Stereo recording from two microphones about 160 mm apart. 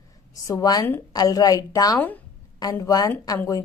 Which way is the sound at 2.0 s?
10° left (ahead or behind).